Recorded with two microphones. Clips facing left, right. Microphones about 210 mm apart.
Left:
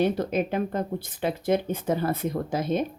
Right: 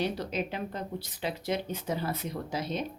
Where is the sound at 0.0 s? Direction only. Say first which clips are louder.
Left 7 dB; 50° left (ahead or behind).